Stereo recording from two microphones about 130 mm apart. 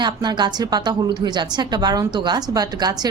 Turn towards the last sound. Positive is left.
turn(degrees=-30)  # may be behind; listen again after turning